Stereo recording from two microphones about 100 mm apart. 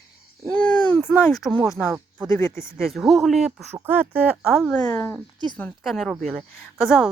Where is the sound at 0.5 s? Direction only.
15° left (ahead or behind).